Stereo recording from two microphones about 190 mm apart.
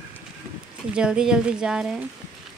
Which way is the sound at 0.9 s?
5° right (ahead or behind).